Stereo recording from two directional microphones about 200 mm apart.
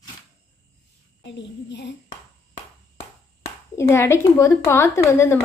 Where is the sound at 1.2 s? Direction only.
60° left (ahead or behind).